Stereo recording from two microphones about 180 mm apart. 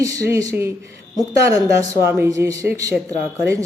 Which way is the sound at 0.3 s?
15° right (ahead or behind).